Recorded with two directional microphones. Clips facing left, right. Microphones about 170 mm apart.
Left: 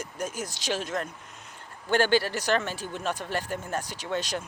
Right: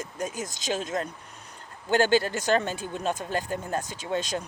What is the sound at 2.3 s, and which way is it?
Speech, 25° right (ahead or behind).